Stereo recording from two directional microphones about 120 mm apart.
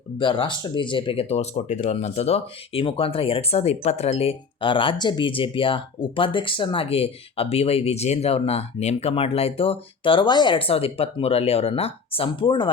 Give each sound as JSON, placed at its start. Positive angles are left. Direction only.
{"t": 0.2, "sound": "speech", "side_deg": 45}